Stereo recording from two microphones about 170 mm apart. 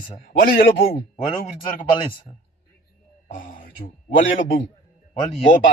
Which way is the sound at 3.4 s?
55° left (ahead or behind).